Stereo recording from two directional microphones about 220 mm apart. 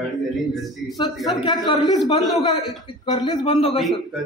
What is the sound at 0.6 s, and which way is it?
Speech, centre (ahead or behind).